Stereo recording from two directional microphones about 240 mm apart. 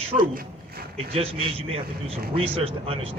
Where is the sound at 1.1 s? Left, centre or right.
Right.